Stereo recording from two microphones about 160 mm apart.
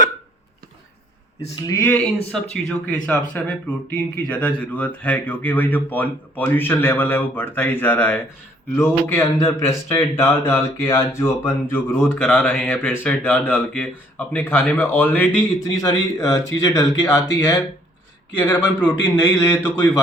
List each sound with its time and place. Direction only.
1.6 s speech: 15° left (ahead or behind)
2.3 s speech: 5° left (ahead or behind)
18.3 s speech: 10° left (ahead or behind)